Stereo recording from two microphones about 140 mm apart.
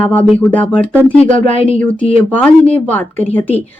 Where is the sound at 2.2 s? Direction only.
10° left (ahead or behind).